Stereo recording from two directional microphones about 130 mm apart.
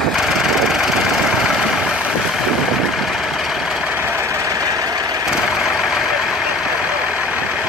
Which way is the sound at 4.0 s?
20° right (ahead or behind).